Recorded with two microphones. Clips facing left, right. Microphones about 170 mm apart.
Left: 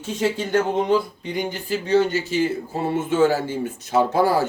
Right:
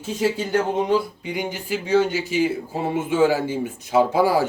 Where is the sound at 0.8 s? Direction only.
10° right (ahead or behind).